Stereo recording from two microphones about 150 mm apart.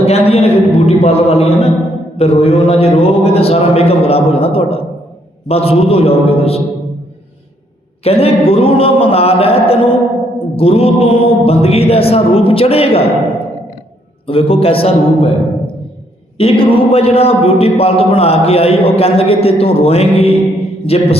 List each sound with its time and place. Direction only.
0.0 s a man's voice: 40° left (ahead or behind)
8.0 s a man's voice: 40° left (ahead or behind)
14.3 s a man's voice: 40° left (ahead or behind)
16.4 s a man's voice: 40° left (ahead or behind)